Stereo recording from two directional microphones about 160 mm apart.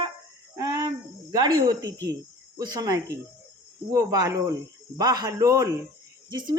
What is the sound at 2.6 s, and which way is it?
A woman's voice, 25° right (ahead or behind).